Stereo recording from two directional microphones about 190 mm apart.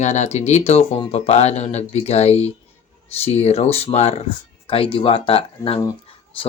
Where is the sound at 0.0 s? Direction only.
35° left (ahead or behind).